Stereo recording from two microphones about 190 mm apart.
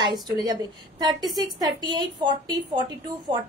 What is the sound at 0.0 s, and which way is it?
A woman's voice, 20° right (ahead or behind).